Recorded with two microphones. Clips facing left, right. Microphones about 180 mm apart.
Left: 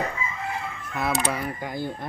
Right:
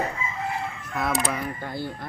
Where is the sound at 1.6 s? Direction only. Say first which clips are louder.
Left 1 dB; 15° left (ahead or behind).